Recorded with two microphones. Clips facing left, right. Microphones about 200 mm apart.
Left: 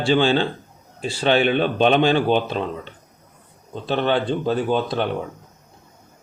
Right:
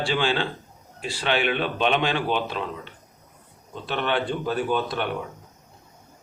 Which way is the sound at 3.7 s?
35° left (ahead or behind).